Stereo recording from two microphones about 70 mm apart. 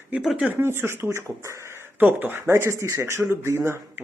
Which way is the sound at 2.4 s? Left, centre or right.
Right.